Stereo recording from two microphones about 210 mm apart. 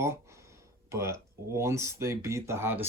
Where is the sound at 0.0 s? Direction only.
15° right (ahead or behind).